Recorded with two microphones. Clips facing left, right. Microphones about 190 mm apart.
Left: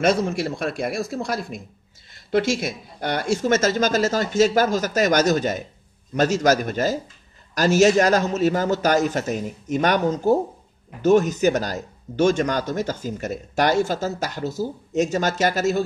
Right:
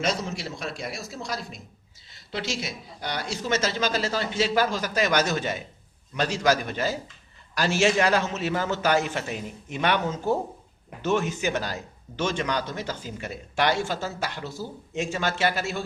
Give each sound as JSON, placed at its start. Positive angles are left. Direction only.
{"t": 0.0, "sound": "a man's voice", "side_deg": 55}